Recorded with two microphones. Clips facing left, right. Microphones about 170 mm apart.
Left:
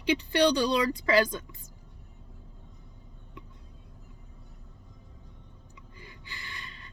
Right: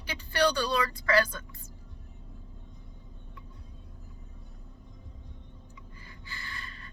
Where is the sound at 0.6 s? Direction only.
15° left (ahead or behind).